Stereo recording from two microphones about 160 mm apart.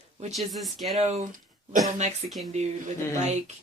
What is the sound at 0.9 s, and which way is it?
Speech, 40° right (ahead or behind).